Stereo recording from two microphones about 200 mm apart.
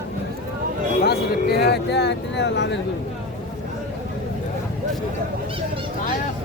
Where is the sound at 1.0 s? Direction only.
50° left (ahead or behind).